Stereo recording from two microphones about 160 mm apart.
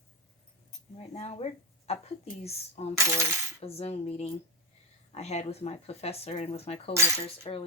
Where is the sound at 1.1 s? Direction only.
40° left (ahead or behind).